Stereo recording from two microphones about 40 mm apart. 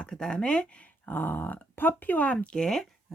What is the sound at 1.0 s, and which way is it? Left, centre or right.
Speech, left.